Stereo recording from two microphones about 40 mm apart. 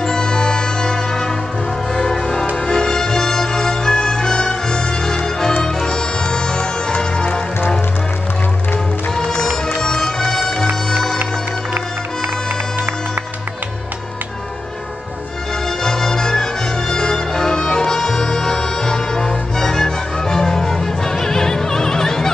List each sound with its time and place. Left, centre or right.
0.0 s music: centre
2.5 s music: centre
9.8 s music: centre
15.8 s music: centre